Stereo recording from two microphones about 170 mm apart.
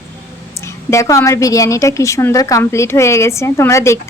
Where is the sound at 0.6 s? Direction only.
15° left (ahead or behind).